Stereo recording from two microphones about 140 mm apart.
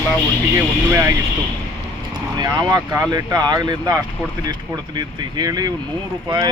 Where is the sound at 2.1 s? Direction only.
30° right (ahead or behind).